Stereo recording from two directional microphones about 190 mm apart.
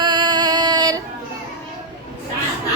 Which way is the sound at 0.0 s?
25° right (ahead or behind).